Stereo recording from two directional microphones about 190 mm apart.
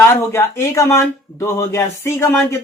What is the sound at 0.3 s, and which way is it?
Speech, 15° left (ahead or behind).